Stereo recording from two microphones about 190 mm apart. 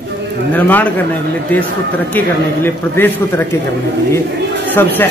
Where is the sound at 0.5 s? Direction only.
10° left (ahead or behind).